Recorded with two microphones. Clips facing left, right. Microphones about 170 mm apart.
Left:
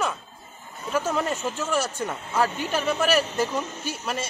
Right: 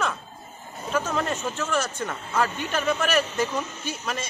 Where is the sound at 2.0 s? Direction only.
15° left (ahead or behind).